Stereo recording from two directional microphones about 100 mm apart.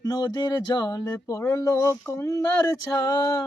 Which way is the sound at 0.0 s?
40° left (ahead or behind).